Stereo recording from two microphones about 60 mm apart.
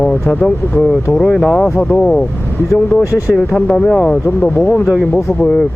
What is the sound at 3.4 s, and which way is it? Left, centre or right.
Speech, centre.